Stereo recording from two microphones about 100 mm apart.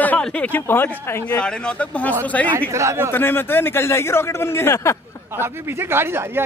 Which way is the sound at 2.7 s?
30° right (ahead or behind).